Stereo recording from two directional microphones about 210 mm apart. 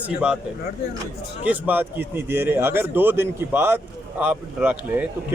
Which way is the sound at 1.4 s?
10° right (ahead or behind).